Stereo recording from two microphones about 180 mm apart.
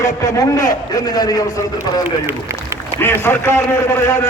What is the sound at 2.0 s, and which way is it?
Speech, 15° right (ahead or behind).